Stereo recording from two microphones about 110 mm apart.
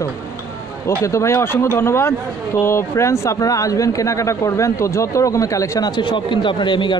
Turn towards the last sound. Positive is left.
turn(degrees=45)  # may be behind; listen again after turning